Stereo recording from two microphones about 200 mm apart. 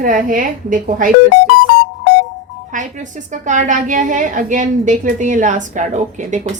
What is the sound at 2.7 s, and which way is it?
A woman's voice, 40° right (ahead or behind).